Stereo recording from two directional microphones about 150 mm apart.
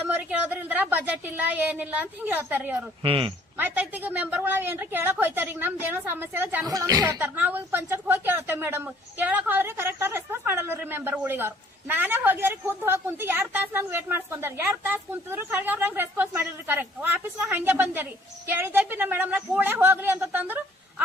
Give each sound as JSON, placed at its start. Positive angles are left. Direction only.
{"t": 0.1, "sound": "a woman's voice", "side_deg": -10}
{"t": 3.0, "sound": "speech", "side_deg": -35}
{"t": 3.6, "sound": "a woman's voice", "side_deg": -15}
{"t": 6.7, "sound": "a woman's voice", "side_deg": -25}